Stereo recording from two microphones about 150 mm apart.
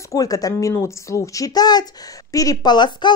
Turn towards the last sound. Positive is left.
turn(degrees=30)  # may be behind; listen again after turning